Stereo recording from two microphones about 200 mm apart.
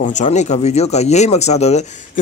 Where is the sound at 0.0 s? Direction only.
35° left (ahead or behind).